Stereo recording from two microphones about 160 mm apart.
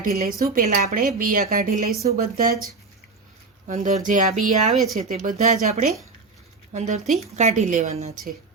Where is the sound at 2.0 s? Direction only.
70° right (ahead or behind).